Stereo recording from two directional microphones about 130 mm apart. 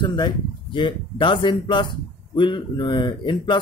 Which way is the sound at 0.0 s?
35° left (ahead or behind).